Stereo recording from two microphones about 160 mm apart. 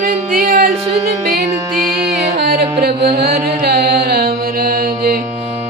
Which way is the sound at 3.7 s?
90° right.